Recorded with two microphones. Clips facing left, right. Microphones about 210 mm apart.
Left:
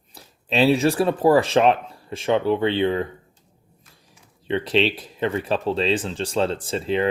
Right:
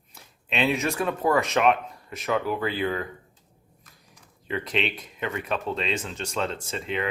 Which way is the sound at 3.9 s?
30° left (ahead or behind).